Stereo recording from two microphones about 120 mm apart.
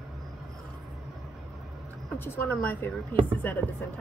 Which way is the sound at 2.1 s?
15° left (ahead or behind).